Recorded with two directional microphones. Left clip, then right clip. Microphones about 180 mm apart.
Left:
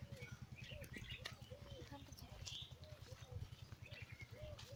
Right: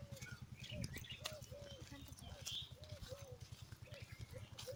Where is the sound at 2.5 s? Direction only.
50° right (ahead or behind).